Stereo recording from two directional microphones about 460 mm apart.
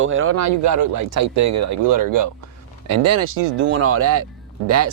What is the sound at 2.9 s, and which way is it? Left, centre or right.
Speech, right.